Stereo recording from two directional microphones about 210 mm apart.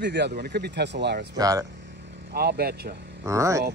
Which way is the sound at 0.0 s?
55° right (ahead or behind).